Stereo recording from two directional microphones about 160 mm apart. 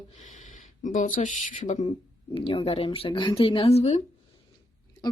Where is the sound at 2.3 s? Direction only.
35° left (ahead or behind).